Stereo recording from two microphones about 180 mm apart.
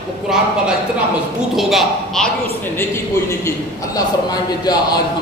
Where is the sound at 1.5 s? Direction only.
Centre (ahead or behind).